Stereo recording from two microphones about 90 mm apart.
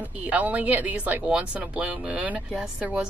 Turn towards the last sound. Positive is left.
turn(degrees=-10)  # may be behind; listen again after turning